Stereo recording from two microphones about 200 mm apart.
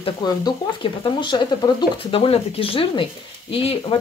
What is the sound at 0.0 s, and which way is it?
Speech, 20° left (ahead or behind).